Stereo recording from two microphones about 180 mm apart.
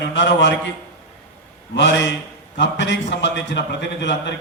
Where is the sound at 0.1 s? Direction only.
80° left.